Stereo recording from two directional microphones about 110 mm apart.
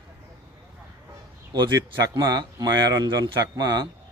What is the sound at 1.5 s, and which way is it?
Speech, 40° right (ahead or behind).